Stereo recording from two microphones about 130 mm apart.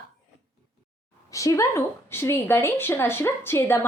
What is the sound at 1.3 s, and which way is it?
A woman's voice, 25° left (ahead or behind).